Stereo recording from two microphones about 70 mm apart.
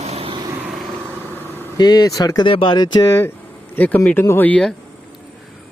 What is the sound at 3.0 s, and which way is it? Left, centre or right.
Speech, left.